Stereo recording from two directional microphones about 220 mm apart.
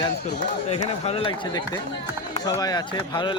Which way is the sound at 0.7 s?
25° left (ahead or behind).